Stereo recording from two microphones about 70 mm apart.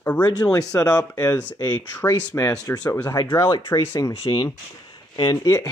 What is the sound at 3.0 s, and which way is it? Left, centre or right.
Speech, left.